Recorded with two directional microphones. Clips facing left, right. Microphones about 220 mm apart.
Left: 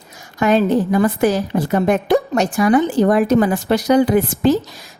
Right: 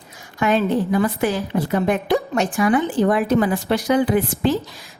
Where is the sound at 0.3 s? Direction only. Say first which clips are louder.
Left 4 dB; 40° left (ahead or behind).